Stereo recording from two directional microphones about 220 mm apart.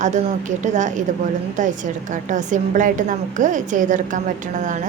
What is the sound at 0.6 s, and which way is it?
Speech, 35° right (ahead or behind).